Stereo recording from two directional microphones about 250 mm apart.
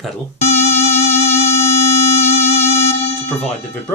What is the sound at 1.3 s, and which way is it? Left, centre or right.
Sine wave, left.